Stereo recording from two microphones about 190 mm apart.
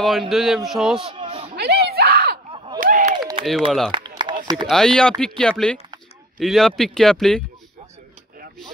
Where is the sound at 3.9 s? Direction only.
25° right (ahead or behind).